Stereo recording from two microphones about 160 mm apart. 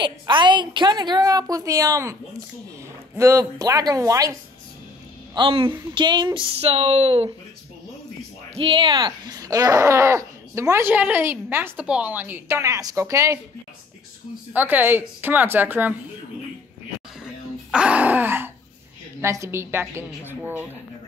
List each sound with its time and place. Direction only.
0.0 s a woman's voice: 30° right (ahead or behind)
3.2 s a woman's voice: 20° right (ahead or behind)
5.3 s speech: 35° right (ahead or behind)
8.5 s speech: 35° right (ahead or behind); by 13.4 s 20° right (ahead or behind)
14.5 s speech: 10° right (ahead or behind)
17.6 s groan: 5° right (ahead or behind)
19.2 s speech: 15° right (ahead or behind)